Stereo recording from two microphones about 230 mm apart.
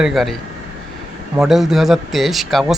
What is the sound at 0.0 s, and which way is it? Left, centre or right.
Speech, centre.